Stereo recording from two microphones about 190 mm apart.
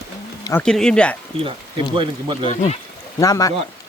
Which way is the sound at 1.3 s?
30° right (ahead or behind).